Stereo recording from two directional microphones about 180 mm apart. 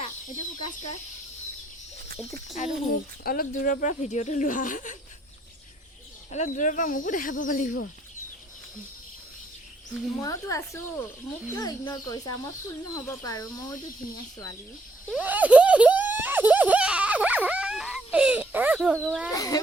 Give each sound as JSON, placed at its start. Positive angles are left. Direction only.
{"t": 2.6, "sound": "speech", "side_deg": 40}
{"t": 3.2, "sound": "speech", "side_deg": 55}
{"t": 6.3, "sound": "speech", "side_deg": 45}
{"t": 10.2, "sound": "speech", "side_deg": 20}
{"t": 15.1, "sound": "a sound", "side_deg": -10}
{"t": 19.3, "sound": "speech", "side_deg": 20}